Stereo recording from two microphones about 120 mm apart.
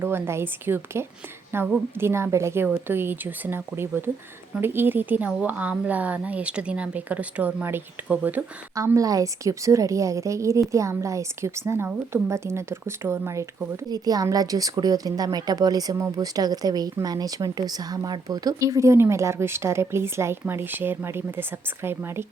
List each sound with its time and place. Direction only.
0.0 s a woman's voice: 20° right (ahead or behind)
8.7 s a woman's voice: 25° right (ahead or behind)